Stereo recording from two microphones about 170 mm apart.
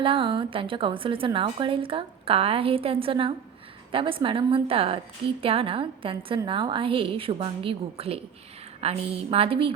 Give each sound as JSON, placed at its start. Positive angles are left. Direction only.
{"t": 0.0, "sound": "a woman's voice", "side_deg": -30}